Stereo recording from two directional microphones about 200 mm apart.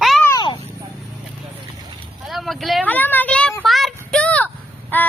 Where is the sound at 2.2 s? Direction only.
Centre (ahead or behind).